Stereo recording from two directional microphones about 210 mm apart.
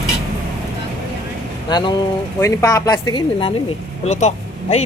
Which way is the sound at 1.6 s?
20° left (ahead or behind).